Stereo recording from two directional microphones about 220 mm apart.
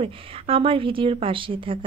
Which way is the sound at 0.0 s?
25° right (ahead or behind).